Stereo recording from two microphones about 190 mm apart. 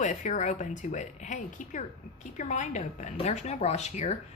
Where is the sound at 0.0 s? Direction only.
40° left (ahead or behind).